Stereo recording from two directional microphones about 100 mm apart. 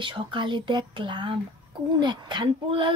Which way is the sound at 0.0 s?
55° right (ahead or behind).